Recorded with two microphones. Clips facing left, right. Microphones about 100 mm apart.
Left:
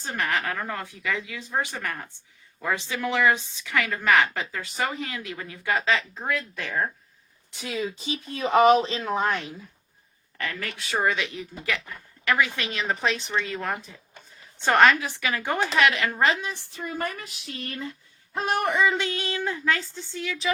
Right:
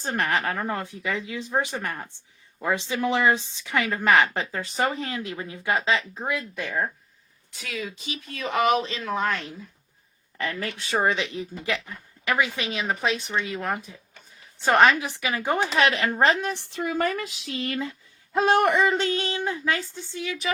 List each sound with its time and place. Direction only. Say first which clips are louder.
0.0 s speech: right 2 dB; 40° right (ahead or behind); by 6.9 s 5° right (ahead or behind)
7.5 s speech: left 4 dB; 25° left (ahead or behind)
10.3 s speech: right 3 dB; 25° right (ahead or behind)
12.9 s speech: even; 5° right (ahead or behind); by 16.4 s 35° right (ahead or behind)
16.4 s a sound: right 5 dB; 65° right (ahead or behind); by 18.8 s 90° right
18.9 s speech: right 3 dB; 30° right (ahead or behind); by 20.3 s 15° right (ahead or behind)